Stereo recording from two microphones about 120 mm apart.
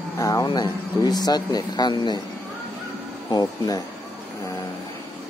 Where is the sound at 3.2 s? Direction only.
30° left (ahead or behind).